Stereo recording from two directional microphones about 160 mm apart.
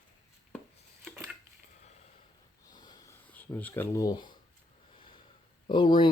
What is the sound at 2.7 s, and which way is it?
Sniff, 25° left (ahead or behind).